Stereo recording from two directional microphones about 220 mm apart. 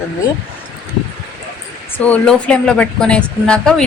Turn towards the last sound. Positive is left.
turn(degrees=5)  # may be behind; listen again after turning